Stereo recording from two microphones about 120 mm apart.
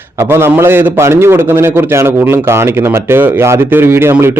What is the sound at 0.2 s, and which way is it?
A man's voice, 20° right (ahead or behind).